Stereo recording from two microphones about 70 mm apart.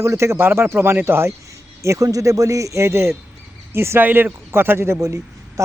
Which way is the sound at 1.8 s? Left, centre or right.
Right.